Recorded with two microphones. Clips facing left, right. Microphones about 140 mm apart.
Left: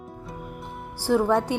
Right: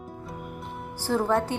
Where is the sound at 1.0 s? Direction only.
15° left (ahead or behind).